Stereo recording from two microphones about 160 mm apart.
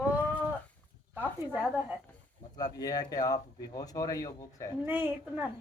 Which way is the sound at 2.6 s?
25° left (ahead or behind).